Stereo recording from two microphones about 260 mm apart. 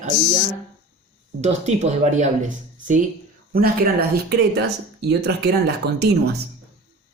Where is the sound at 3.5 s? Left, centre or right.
Right.